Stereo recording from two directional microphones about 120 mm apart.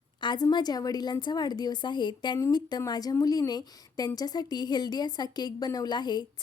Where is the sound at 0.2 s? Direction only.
35° left (ahead or behind).